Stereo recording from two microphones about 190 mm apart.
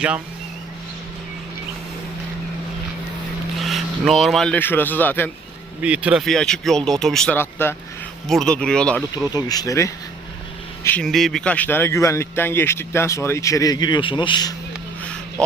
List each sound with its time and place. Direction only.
3.6 s a man's voice: centre (ahead or behind)
5.8 s speech: 5° right (ahead or behind)
9.3 s speech: 20° left (ahead or behind)
10.8 s speech: 5° left (ahead or behind); by 14.5 s 25° left (ahead or behind)